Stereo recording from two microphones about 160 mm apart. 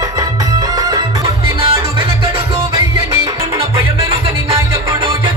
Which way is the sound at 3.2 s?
20° right (ahead or behind).